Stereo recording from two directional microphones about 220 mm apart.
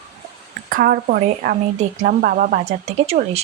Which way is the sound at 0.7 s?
40° right (ahead or behind).